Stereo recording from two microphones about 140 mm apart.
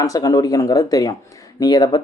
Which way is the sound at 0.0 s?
25° left (ahead or behind).